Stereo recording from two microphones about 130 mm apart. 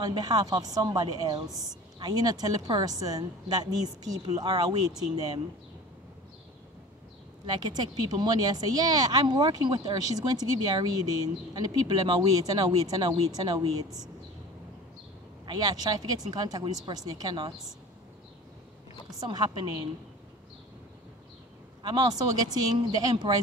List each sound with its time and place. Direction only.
0.0 s a woman's voice: 30° right (ahead or behind)
7.4 s speech: 30° right (ahead or behind)
15.4 s speech: 30° right (ahead or behind)
19.1 s speech: 30° right (ahead or behind)
21.8 s speech: 30° right (ahead or behind)